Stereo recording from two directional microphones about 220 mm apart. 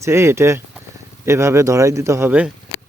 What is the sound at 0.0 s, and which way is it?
A man's voice, 10° right (ahead or behind).